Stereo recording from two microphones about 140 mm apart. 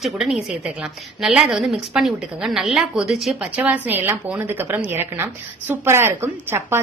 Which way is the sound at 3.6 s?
15° right (ahead or behind).